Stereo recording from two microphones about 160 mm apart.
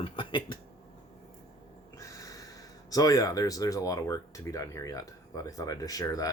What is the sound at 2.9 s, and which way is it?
Speech, 20° left (ahead or behind).